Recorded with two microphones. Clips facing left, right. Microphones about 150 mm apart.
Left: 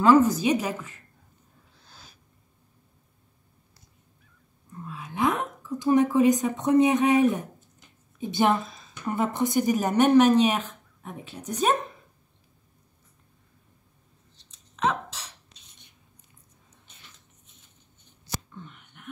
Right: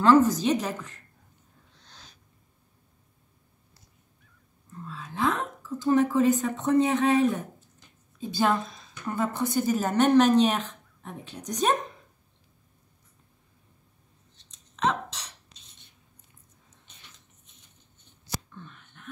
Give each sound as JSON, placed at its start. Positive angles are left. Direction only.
{"t": 0.0, "sound": "a woman's voice", "side_deg": 10}
{"t": 1.7, "sound": "owl", "side_deg": 5}
{"t": 4.8, "sound": "speech", "side_deg": 15}
{"t": 8.5, "sound": "a sound", "side_deg": 0}
{"t": 9.0, "sound": "a woman's voice", "side_deg": 20}
{"t": 14.5, "sound": "dog", "side_deg": 5}
{"t": 18.5, "sound": "a sound", "side_deg": 15}